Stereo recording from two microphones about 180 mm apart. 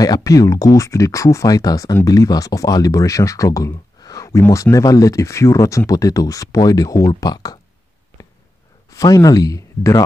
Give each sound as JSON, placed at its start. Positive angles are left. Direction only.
{"t": 0.0, "sound": "speech", "side_deg": 20}
{"t": 8.9, "sound": "speech", "side_deg": 20}